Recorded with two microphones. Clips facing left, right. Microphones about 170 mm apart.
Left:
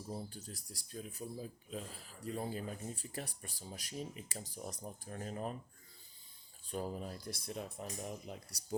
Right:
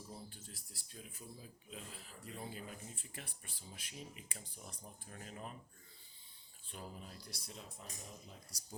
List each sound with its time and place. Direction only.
0.1 s speech: 40° left (ahead or behind)
6.7 s speech: 45° left (ahead or behind); by 8.6 s 65° left (ahead or behind)